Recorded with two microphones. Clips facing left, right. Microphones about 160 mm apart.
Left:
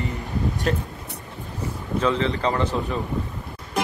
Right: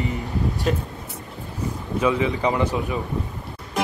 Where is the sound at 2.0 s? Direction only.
10° right (ahead or behind).